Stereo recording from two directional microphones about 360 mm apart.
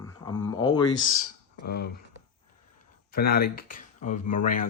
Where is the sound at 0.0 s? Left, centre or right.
Centre.